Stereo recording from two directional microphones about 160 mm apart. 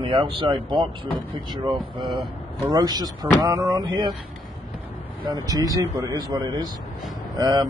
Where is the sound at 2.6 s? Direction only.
25° right (ahead or behind).